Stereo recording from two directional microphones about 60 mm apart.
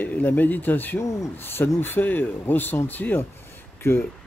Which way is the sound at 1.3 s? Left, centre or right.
Left.